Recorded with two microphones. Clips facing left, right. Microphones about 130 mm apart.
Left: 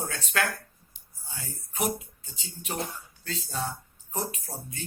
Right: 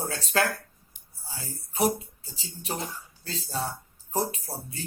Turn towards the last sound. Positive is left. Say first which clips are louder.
# right 2 dB
turn(degrees=-35)  # may be behind; listen again after turning